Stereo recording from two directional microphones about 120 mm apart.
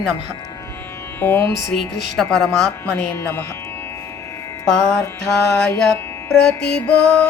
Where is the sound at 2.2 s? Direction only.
5° left (ahead or behind).